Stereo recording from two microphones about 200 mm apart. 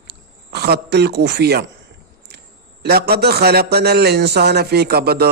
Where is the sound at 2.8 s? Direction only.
50° right (ahead or behind).